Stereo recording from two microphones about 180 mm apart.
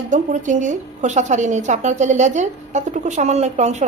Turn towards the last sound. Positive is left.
turn(degrees=-40)  # may be behind; listen again after turning